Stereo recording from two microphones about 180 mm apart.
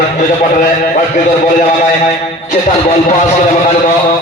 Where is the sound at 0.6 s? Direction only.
50° left (ahead or behind).